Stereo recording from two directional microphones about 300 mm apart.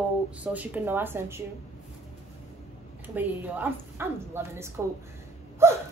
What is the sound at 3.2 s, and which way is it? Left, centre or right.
A woman's voice, centre.